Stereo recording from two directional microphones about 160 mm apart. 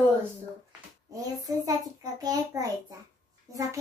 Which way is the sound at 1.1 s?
20° right (ahead or behind).